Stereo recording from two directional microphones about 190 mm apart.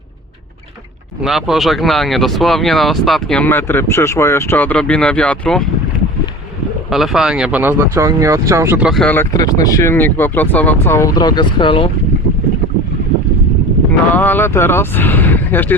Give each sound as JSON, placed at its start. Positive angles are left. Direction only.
{"t": 1.2, "sound": "speech", "side_deg": 0}
{"t": 6.9, "sound": "speech", "side_deg": 0}
{"t": 8.9, "sound": "speech", "side_deg": 5}
{"t": 14.2, "sound": "speech", "side_deg": 10}